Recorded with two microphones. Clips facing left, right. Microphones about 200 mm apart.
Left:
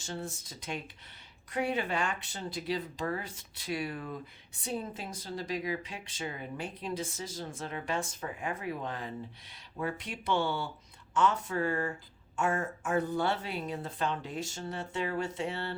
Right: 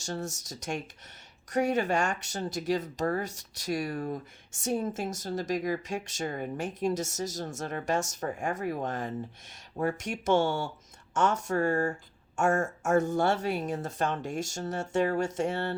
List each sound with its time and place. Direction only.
0.0 s speech: 45° right (ahead or behind)